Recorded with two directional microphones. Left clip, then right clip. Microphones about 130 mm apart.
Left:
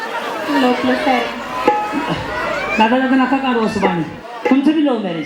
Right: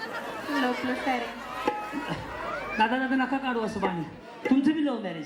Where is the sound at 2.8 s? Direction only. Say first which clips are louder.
Left 11 dB; 35° right (ahead or behind).